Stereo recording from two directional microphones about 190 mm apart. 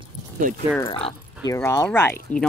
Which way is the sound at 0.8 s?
25° left (ahead or behind).